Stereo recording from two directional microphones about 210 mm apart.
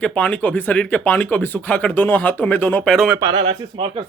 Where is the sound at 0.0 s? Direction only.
5° left (ahead or behind).